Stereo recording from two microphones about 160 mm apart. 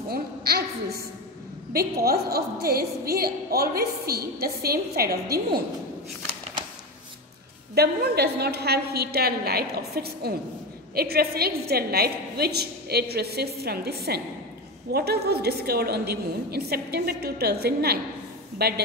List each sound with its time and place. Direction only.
0.1 s a woman's voice: 75° right (ahead or behind)
7.7 s a woman's voice: 80° right